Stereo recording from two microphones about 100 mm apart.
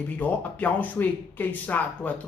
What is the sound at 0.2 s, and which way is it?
Speech, 15° left (ahead or behind).